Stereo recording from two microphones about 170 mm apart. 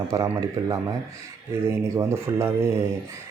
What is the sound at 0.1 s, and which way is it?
Speech, 20° right (ahead or behind).